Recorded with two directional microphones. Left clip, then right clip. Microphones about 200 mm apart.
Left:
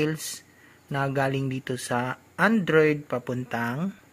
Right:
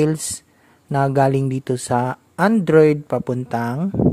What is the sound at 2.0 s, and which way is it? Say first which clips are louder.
Speech: right 5 dB; 45° right (ahead or behind).